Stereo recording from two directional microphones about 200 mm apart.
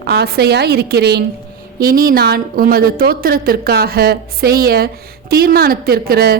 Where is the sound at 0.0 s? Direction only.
55° right (ahead or behind).